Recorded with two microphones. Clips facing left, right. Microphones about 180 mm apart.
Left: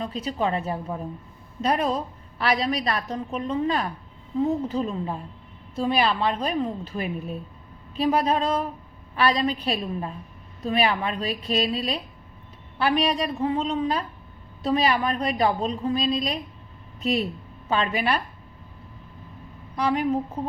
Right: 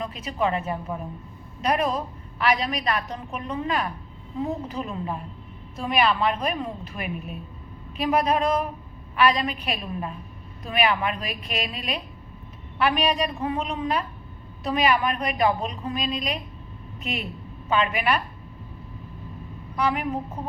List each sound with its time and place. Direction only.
0.0 s a woman's voice: 30° left (ahead or behind)
19.7 s a woman's voice: 35° left (ahead or behind)